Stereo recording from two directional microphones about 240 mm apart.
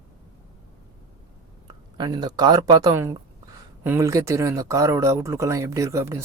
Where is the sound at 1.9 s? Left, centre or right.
Centre.